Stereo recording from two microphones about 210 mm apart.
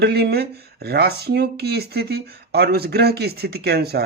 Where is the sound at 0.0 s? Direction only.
50° right (ahead or behind).